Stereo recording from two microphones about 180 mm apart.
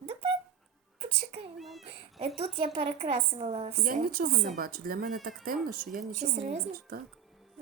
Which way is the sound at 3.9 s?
50° right (ahead or behind).